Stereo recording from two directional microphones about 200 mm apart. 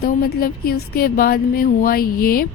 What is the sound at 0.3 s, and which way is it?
A woman's voice, 50° left (ahead or behind).